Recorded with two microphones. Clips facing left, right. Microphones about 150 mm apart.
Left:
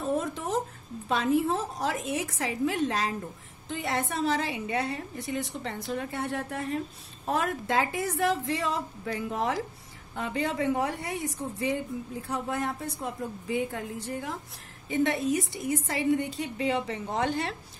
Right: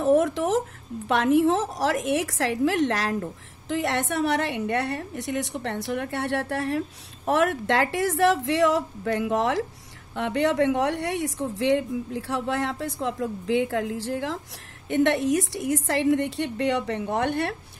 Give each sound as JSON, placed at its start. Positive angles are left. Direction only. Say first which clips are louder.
{"t": 0.0, "sound": "a sound", "louder": "right 9 dB", "side_deg": -90}
{"t": 1.0, "sound": "a woman's voice", "louder": "right 6 dB", "side_deg": -80}
{"t": 14.9, "sound": "a woman's voice", "louder": "right 5 dB", "side_deg": -75}